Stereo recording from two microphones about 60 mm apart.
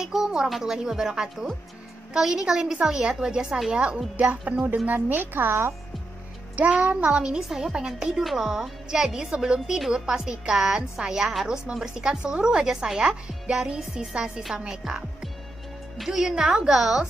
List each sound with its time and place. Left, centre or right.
0.0 s a sound: centre
0.5 s a woman's voice: centre
4.2 s music: right
4.8 s speech: right
6.5 s music: right
7.1 s a woman's voice: centre